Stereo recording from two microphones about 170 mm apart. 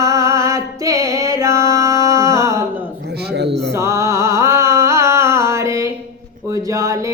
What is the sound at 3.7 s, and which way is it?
Music, 15° right (ahead or behind).